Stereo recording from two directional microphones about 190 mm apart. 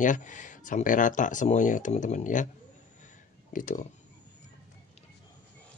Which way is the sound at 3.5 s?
45° left (ahead or behind).